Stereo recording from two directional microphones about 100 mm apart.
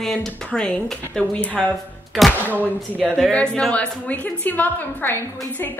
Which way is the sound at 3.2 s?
10° left (ahead or behind).